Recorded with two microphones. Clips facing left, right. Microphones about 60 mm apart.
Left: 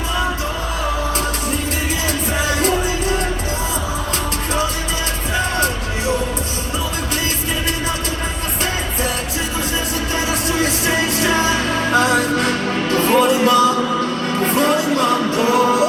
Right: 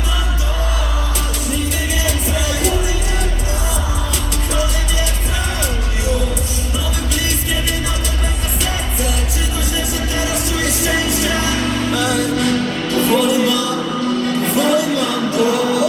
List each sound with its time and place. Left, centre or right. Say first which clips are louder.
2.0 s music: left 1 dB; left
10.6 s music: even; left